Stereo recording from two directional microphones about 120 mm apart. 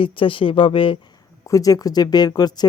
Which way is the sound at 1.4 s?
30° left (ahead or behind).